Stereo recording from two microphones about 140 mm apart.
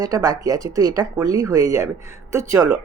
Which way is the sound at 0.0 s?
25° right (ahead or behind).